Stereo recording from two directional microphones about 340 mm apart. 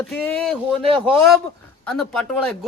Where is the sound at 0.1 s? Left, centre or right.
Centre.